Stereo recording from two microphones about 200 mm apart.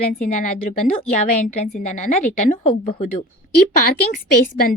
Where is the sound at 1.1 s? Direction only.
40° left (ahead or behind).